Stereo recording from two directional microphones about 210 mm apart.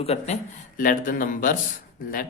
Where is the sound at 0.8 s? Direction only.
40° left (ahead or behind).